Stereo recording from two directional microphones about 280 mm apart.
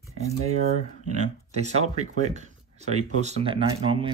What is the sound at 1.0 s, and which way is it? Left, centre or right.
Speech, right.